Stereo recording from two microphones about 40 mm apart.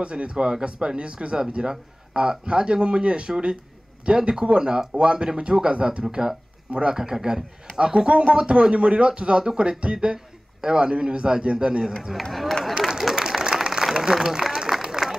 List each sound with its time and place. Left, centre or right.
0.0 s a man's voice: right
7.0 s a man's voice: centre
12.2 s speech: centre
12.8 s applause: centre